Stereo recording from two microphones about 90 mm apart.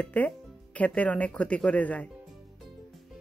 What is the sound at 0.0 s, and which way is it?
Speech, 15° left (ahead or behind).